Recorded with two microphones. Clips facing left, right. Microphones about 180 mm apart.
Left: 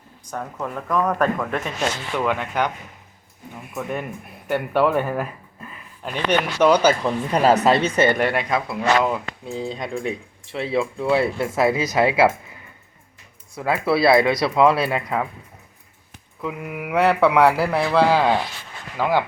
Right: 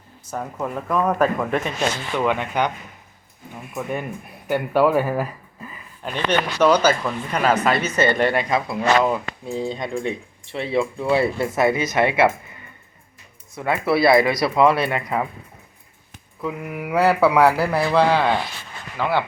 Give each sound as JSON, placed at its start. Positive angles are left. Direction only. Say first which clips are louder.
{"t": 0.3, "sound": "speech", "louder": "right 2 dB", "side_deg": -5}
{"t": 6.2, "sound": "speech", "louder": "even", "side_deg": 15}
{"t": 7.3, "sound": "speech", "louder": "left 3 dB", "side_deg": 35}
{"t": 7.9, "sound": "speech", "louder": "even", "side_deg": 10}
{"t": 13.6, "sound": "speech", "louder": "even", "side_deg": 5}
{"t": 16.5, "sound": "speech", "louder": "right 1 dB", "side_deg": 15}
{"t": 16.9, "sound": "speech", "louder": "even", "side_deg": -5}